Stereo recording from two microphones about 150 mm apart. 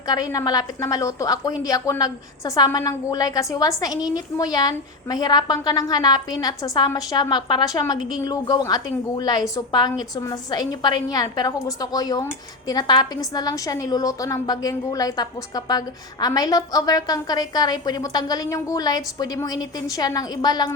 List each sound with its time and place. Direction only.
0.1 s a woman's voice: 25° left (ahead or behind)